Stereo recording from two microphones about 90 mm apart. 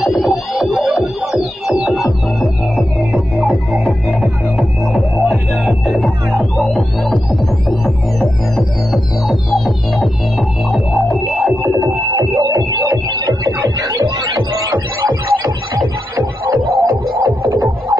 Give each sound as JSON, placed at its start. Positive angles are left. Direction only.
{"t": 0.0, "sound": "music", "side_deg": 0}
{"t": 2.4, "sound": "music", "side_deg": -15}
{"t": 3.4, "sound": "music", "side_deg": 0}
{"t": 11.4, "sound": "music", "side_deg": -20}
{"t": 11.8, "sound": "music", "side_deg": -50}
{"t": 16.2, "sound": "music", "side_deg": -45}